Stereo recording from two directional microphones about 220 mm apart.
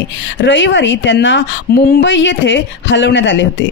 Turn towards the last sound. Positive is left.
turn(degrees=55)  # may be behind; listen again after turning